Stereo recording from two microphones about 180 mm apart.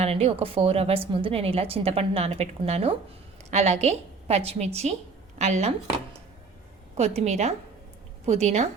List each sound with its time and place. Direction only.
0.0 s a woman's voice: 35° right (ahead or behind)
6.9 s a woman's voice: 35° right (ahead or behind)